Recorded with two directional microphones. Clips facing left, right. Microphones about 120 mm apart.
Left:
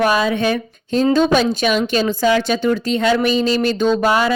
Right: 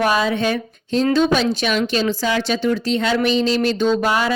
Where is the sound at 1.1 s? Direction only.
45° left (ahead or behind).